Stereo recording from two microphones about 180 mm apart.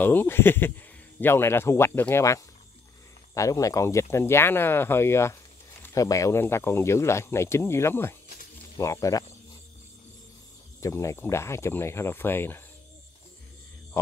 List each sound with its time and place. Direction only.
0.0 s speech: 10° left (ahead or behind)
10.8 s speech: 15° left (ahead or behind)